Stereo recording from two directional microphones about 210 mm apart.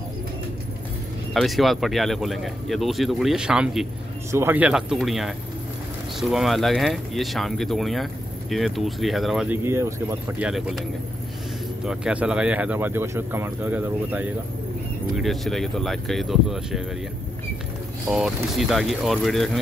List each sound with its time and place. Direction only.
1.3 s speech: centre (ahead or behind)
9.7 s speech: 10° right (ahead or behind)
10.5 s speech: centre (ahead or behind)
18.1 s speech: centre (ahead or behind)